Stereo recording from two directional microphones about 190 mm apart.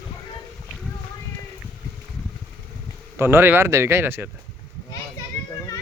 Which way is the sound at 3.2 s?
10° right (ahead or behind).